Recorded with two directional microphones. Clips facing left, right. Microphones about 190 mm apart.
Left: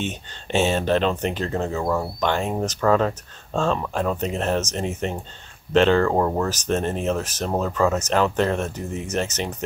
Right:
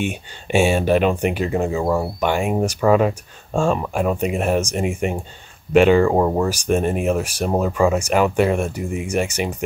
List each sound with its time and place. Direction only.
0.0 s speech: 10° right (ahead or behind)